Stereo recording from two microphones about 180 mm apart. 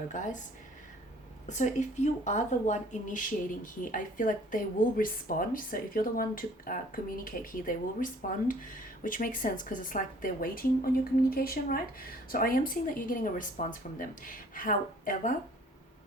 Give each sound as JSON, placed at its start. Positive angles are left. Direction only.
{"t": 0.1, "sound": "speech", "side_deg": 45}
{"t": 1.5, "sound": "speech", "side_deg": 40}